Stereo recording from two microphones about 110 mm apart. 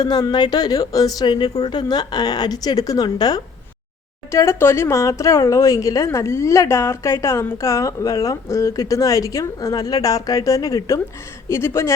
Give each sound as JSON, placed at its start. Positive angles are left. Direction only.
{"t": 0.0, "sound": "a woman's voice", "side_deg": 40}
{"t": 4.3, "sound": "speech", "side_deg": 25}